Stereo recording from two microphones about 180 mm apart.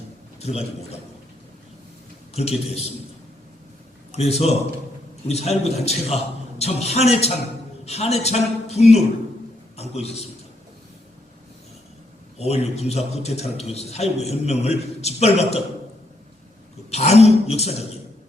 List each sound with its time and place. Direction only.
0.3 s a man's voice: 35° left (ahead or behind)
2.3 s a man's voice: 35° left (ahead or behind)
4.1 s a man's voice: 35° left (ahead or behind)
12.4 s a man's voice: 35° left (ahead or behind)
16.9 s a man's voice: 35° left (ahead or behind)